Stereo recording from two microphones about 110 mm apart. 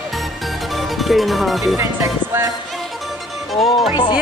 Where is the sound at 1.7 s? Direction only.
25° right (ahead or behind).